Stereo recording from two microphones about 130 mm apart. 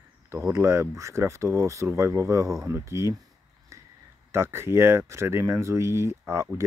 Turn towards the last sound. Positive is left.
turn(degrees=-20)  # may be behind; listen again after turning